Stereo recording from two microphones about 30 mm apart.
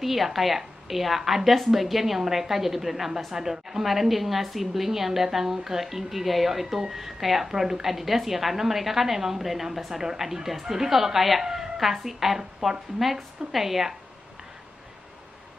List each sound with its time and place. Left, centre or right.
0.0 s a woman's voice: centre
11.4 s a sound: centre
11.8 s a woman's voice: centre